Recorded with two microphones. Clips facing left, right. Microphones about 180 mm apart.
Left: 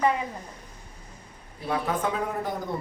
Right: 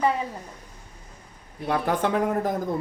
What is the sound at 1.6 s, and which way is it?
Speech, 70° right (ahead or behind).